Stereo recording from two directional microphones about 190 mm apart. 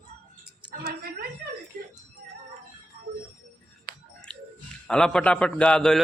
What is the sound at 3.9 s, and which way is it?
Music, 50° right (ahead or behind).